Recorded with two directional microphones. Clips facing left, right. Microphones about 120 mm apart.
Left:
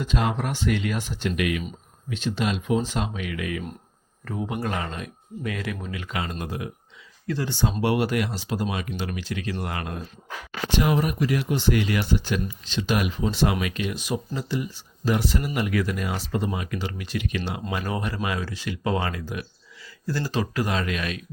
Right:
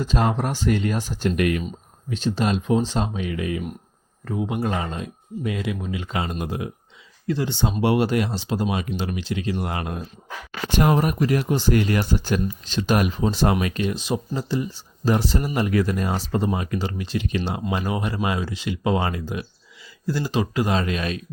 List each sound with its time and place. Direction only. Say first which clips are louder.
0.0 s speech: right 3 dB; 35° right (ahead or behind)
4.3 s speech: right 4 dB; 20° right (ahead or behind)
10.7 s speech: right 3 dB; 45° right (ahead or behind); by 21.2 s 30° right (ahead or behind)